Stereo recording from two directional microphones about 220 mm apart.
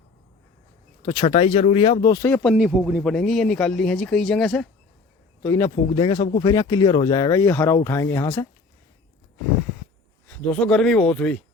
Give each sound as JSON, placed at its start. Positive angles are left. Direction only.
{"t": 1.0, "sound": "speech", "side_deg": 20}
{"t": 10.2, "sound": "speech", "side_deg": 5}